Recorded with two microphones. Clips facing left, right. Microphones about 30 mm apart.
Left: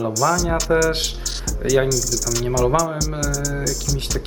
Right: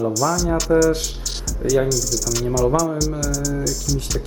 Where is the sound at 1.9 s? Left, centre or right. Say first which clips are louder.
Even; centre.